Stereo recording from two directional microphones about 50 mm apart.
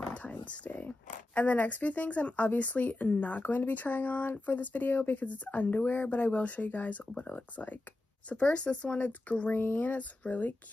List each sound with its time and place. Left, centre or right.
0.1 s speech: left
5.2 s speech: left